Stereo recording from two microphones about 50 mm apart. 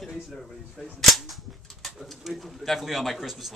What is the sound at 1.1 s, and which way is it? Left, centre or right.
Cap gun, centre.